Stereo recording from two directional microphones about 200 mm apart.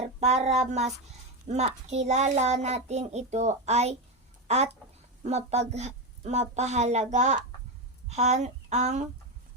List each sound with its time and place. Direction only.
0.2 s a child's voice: 30° right (ahead or behind)